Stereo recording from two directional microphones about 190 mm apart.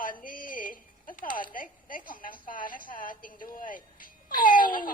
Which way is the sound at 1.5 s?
45° left (ahead or behind).